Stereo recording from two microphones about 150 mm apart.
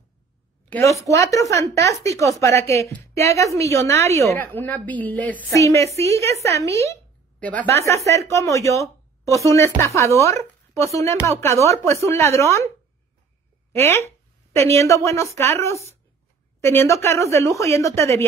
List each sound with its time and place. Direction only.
0.7 s a woman's voice: 15° left (ahead or behind)
5.6 s a woman's voice: 20° left (ahead or behind)
7.3 s a woman's voice: 10° left (ahead or behind)
7.8 s a woman's voice: 20° left (ahead or behind)
13.7 s a woman's voice: 15° left (ahead or behind)